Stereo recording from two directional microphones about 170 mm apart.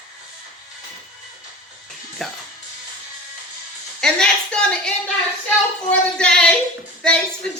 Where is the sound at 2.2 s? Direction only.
Centre (ahead or behind).